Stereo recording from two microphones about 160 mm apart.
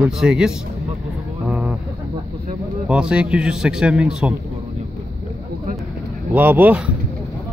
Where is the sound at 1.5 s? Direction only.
5° right (ahead or behind).